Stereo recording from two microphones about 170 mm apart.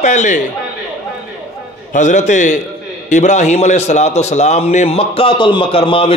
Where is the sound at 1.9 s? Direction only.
45° left (ahead or behind).